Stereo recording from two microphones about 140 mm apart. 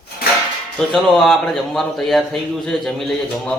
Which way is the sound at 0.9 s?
Centre (ahead or behind).